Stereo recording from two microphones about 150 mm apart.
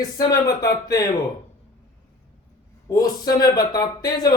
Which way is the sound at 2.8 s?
25° left (ahead or behind).